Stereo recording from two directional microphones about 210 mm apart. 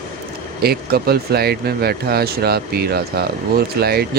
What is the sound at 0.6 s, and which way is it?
Speech, 50° right (ahead or behind).